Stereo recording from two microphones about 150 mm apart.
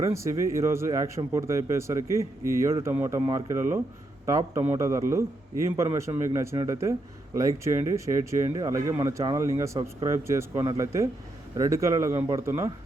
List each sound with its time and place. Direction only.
0.0 s speech: 20° right (ahead or behind)